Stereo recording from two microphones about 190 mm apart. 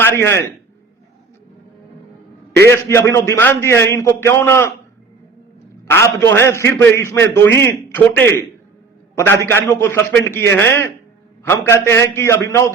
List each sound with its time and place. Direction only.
0.0 s a sound: 10° left (ahead or behind)
2.6 s a man's voice: 15° left (ahead or behind)
5.9 s a man's voice: 15° left (ahead or behind)